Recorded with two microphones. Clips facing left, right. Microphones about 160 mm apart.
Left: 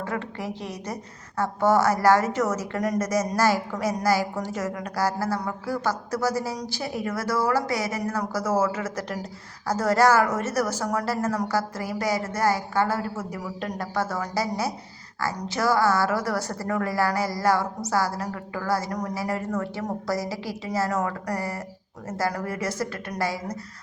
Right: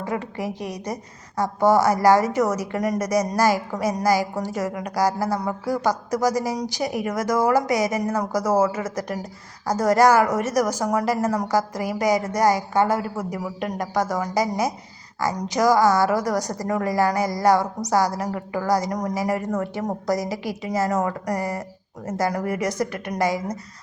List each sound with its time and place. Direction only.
0.0 s a woman's voice: 15° right (ahead or behind)